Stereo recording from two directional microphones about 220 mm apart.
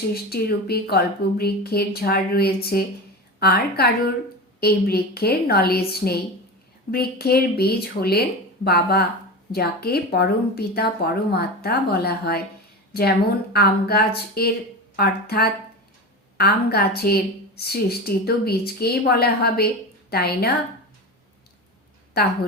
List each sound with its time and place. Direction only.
0.1 s a woman's voice: 45° left (ahead or behind)
22.2 s a woman's voice: 45° left (ahead or behind)